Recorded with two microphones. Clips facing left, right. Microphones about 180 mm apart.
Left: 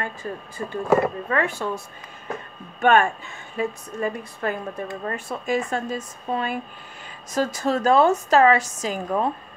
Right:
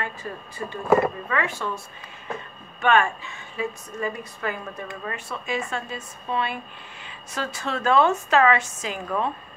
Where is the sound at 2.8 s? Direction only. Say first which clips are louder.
Left 3 dB; 45° left (ahead or behind).